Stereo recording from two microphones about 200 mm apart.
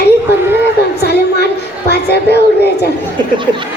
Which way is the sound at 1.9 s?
55° left (ahead or behind).